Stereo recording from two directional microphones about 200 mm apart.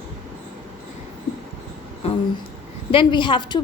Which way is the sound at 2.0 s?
30° left (ahead or behind).